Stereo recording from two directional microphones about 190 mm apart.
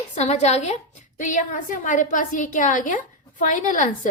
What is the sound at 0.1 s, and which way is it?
A woman's voice, 35° left (ahead or behind).